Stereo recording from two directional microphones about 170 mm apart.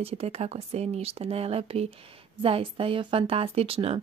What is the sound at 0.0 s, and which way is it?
Speech, 35° right (ahead or behind).